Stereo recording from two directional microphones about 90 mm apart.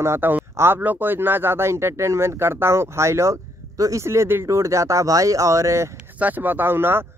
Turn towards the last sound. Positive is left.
turn(degrees=-25)  # may be behind; listen again after turning